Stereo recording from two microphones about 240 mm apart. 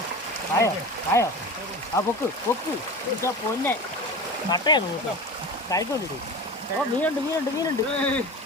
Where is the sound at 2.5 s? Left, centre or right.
Centre.